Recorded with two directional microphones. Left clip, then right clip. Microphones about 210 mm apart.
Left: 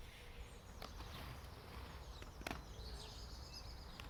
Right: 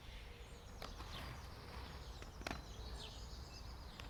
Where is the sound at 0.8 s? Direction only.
15° right (ahead or behind).